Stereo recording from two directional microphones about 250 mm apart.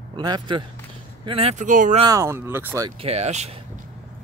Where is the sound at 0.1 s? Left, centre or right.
Centre.